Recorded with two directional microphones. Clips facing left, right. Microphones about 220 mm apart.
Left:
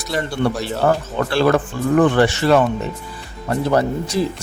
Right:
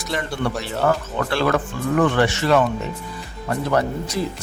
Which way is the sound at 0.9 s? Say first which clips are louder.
Left 2 dB; 30° left (ahead or behind).